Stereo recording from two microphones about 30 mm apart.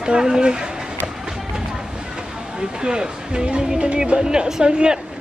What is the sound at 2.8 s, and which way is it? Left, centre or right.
Speech, right.